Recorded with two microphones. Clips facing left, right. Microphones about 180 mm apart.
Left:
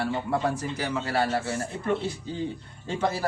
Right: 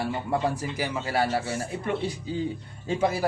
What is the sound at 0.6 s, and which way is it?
Speech, 10° right (ahead or behind).